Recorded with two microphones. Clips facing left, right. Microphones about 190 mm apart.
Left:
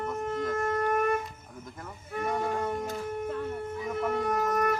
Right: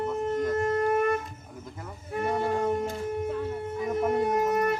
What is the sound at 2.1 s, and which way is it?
Music, 30° right (ahead or behind).